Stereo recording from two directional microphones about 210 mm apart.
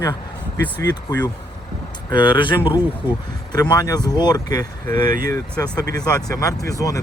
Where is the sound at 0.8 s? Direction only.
20° left (ahead or behind).